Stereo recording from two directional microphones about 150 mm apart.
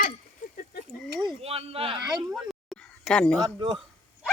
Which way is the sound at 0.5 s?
80° left.